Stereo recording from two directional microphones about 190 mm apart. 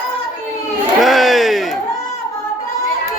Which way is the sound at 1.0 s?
Centre (ahead or behind).